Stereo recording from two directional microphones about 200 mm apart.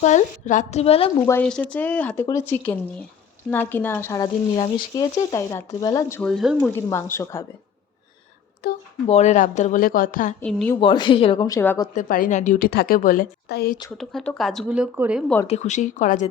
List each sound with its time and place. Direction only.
0.0 s speech: 35° left (ahead or behind)
1.3 s speech: 5° left (ahead or behind)
6.7 s speech: 10° left (ahead or behind)
9.0 s speech: 35° left (ahead or behind)
10.4 s speech: 5° left (ahead or behind)
10.8 s speech: 25° left (ahead or behind)
11.9 s a woman's voice: 45° left (ahead or behind)
14.0 s speech: centre (ahead or behind)
15.4 s speech: 35° left (ahead or behind)